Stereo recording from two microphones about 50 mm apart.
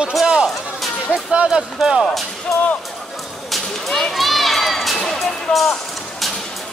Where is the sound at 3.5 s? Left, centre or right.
Centre.